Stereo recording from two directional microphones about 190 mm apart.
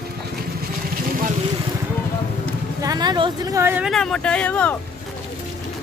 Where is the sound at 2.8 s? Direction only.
20° right (ahead or behind).